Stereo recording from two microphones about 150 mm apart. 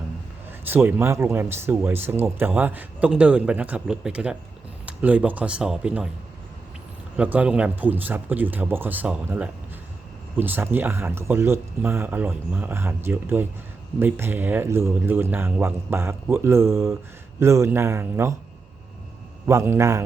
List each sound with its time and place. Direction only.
0.7 s speech: 15° right (ahead or behind)
7.2 s a man's voice: 10° right (ahead or behind)
19.5 s a man's voice: 20° right (ahead or behind)